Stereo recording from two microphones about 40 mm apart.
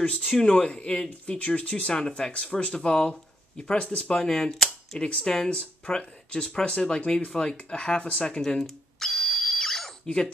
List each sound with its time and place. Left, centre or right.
0.2 s speech: centre
3.7 s speech: left
4.1 s speech: centre
8.4 s a sound: centre